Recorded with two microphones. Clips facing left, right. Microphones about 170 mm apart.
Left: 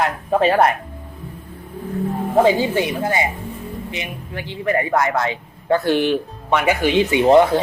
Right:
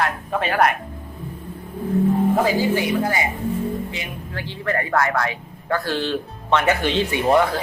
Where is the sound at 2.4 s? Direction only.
25° left (ahead or behind).